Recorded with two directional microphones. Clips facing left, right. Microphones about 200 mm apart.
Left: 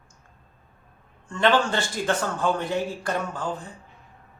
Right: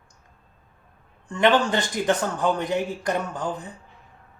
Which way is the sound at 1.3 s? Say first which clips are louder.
Right 2 dB; 15° right (ahead or behind).